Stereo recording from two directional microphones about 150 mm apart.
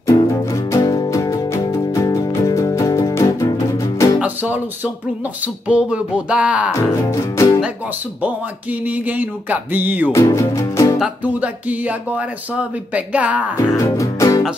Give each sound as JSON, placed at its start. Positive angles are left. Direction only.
{"t": 0.0, "sound": "music", "side_deg": 20}
{"t": 4.2, "sound": "music", "side_deg": -10}
{"t": 5.4, "sound": "speech", "side_deg": -10}
{"t": 6.7, "sound": "music", "side_deg": 20}
{"t": 8.2, "sound": "speech", "side_deg": -10}
{"t": 10.1, "sound": "music", "side_deg": 20}
{"t": 11.0, "sound": "speech", "side_deg": -10}
{"t": 13.7, "sound": "music", "side_deg": 20}